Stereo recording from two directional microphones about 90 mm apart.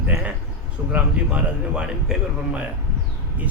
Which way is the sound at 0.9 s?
10° right (ahead or behind).